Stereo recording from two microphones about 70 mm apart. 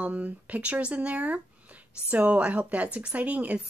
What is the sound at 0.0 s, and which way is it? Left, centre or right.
A woman's voice, right.